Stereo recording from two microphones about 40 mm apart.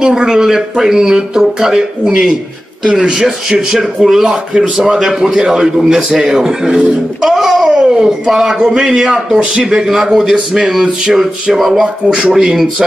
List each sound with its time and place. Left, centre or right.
0.0 s speech: centre
2.9 s speech: centre